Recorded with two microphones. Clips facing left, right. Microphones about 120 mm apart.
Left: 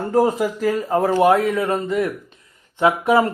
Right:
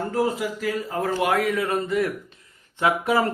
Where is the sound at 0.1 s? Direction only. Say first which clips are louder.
Left 9 dB; 40° left (ahead or behind).